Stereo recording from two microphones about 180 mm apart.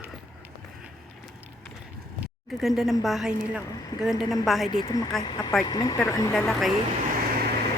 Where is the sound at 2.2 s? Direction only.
Centre (ahead or behind).